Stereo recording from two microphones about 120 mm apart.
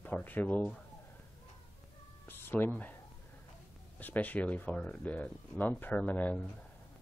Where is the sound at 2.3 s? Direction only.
15° left (ahead or behind).